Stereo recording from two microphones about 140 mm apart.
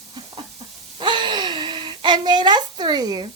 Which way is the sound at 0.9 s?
35° right (ahead or behind).